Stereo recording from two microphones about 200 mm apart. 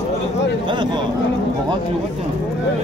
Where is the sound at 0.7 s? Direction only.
25° right (ahead or behind).